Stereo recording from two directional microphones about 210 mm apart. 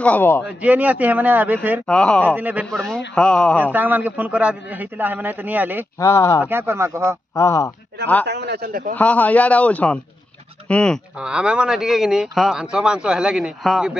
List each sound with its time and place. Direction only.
0.0 s a man's voice: 10° left (ahead or behind)
0.5 s a man's voice: 5° right (ahead or behind)
1.9 s speech: 5° left (ahead or behind)
2.2 s a man's voice: 10° right (ahead or behind)
3.5 s a man's voice: 10° right (ahead or behind)
5.9 s a man's voice: 15° left (ahead or behind)
6.4 s a man's voice: 10° right (ahead or behind)
7.3 s a man's voice: 15° left (ahead or behind)
8.3 s a man's voice: 50° right (ahead or behind)
8.9 s a man's voice: 5° left (ahead or behind)